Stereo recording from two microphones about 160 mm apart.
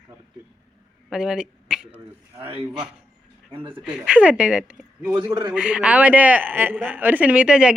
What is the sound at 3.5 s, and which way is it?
Speech, 35° right (ahead or behind).